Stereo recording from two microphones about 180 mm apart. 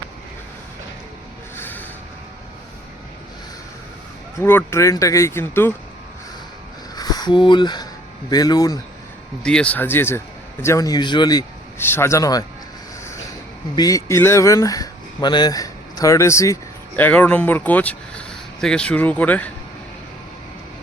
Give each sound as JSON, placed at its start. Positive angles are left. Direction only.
{"t": 1.5, "sound": "a sound", "side_deg": 10}
{"t": 4.4, "sound": "speech", "side_deg": 15}
{"t": 6.9, "sound": "a sound", "side_deg": 20}
{"t": 8.3, "sound": "speech", "side_deg": 20}
{"t": 9.4, "sound": "speech", "side_deg": 5}
{"t": 13.7, "sound": "speech", "side_deg": 20}